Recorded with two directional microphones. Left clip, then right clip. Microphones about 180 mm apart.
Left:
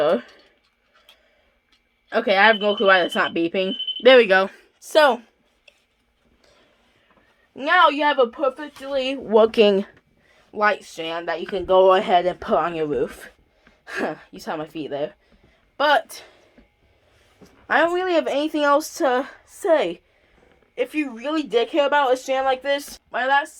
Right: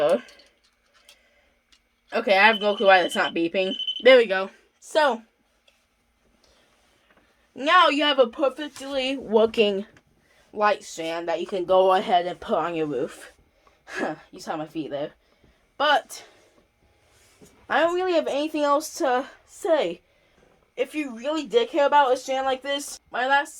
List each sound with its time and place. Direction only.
0.0 s speech: 30° left (ahead or behind)
2.0 s speech: 25° left (ahead or behind)
4.2 s speech: 45° left (ahead or behind)
7.5 s speech: 15° left (ahead or behind)
7.9 s speech: centre (ahead or behind)
8.9 s speech: 20° left (ahead or behind); by 9.9 s 50° left (ahead or behind)
10.5 s speech: 15° left (ahead or behind)
17.7 s speech: 25° left (ahead or behind)